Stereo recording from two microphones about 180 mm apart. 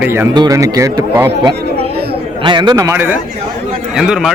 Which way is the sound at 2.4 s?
25° right (ahead or behind).